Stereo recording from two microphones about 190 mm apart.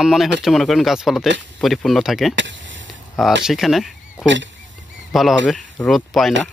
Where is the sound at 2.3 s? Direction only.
70° right (ahead or behind).